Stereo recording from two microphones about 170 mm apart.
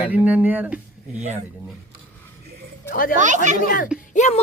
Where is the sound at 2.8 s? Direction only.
60° left (ahead or behind).